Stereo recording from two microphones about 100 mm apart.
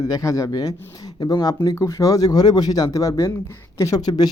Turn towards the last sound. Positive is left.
turn(degrees=45)  # may be behind; listen again after turning